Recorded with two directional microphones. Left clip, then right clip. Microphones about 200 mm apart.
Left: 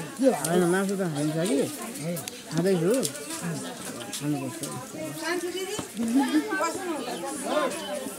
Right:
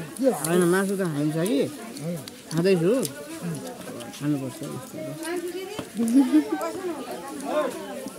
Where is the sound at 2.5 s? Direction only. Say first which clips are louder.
Right 3 dB; 25° right (ahead or behind).